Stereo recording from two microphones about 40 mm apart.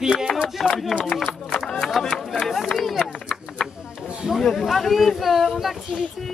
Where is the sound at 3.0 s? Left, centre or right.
Left.